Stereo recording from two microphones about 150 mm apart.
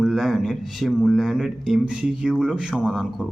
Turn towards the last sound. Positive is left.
turn(degrees=0)  # may be behind; listen again after turning